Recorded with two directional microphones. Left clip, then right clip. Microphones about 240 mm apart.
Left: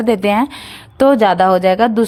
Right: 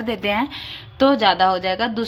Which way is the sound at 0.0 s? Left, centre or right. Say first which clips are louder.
Left 8 dB; left.